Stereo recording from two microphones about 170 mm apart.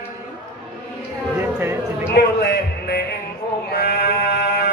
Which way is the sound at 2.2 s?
65° left (ahead or behind).